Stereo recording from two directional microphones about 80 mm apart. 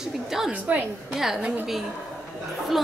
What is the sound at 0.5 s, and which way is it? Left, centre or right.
Speech, centre.